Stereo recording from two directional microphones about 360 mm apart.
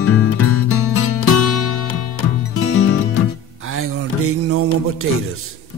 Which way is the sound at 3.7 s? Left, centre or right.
Right.